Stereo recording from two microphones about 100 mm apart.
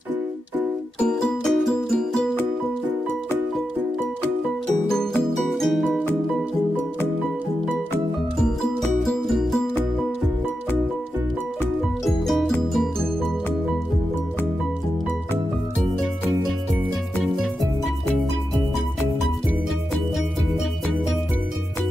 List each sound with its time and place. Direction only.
1.0 s music: 5° left (ahead or behind)
4.8 s music: 5° left (ahead or behind)
5.9 s music: 10° left (ahead or behind)
9.0 s music: centre (ahead or behind)
12.0 s music: centre (ahead or behind)